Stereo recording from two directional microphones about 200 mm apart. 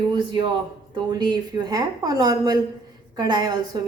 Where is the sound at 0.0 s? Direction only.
20° right (ahead or behind).